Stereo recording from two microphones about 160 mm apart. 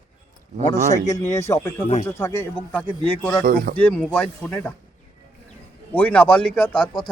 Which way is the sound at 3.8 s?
10° left (ahead or behind).